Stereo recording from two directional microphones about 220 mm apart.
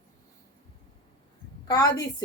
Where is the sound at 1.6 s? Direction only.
15° left (ahead or behind).